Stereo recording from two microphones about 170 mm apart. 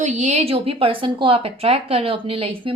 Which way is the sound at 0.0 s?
45° right (ahead or behind).